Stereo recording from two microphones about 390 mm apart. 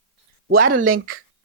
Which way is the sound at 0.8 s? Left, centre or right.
Right.